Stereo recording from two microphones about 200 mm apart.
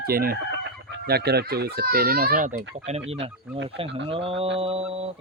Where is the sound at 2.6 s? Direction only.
65° right (ahead or behind).